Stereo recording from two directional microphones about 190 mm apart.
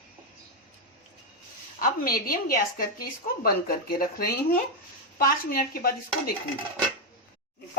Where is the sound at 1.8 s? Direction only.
50° left (ahead or behind).